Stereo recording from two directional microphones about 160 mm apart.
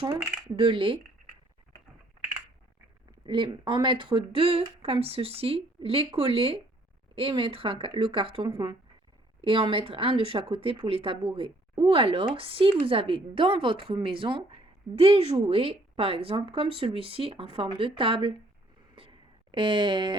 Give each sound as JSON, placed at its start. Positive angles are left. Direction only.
{"t": 0.0, "sound": "a woman's voice", "side_deg": -35}
{"t": 3.2, "sound": "a woman's voice", "side_deg": -30}
{"t": 18.9, "sound": "a sound", "side_deg": -35}